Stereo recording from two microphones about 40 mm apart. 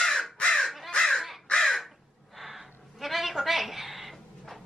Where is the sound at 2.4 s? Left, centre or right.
Centre.